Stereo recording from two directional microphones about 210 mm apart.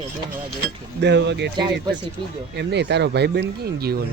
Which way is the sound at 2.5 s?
55° right (ahead or behind).